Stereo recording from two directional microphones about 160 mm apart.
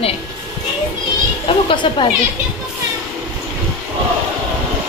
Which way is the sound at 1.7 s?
30° left (ahead or behind).